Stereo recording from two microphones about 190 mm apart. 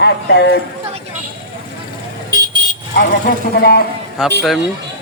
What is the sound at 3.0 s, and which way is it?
Speech, 55° left (ahead or behind).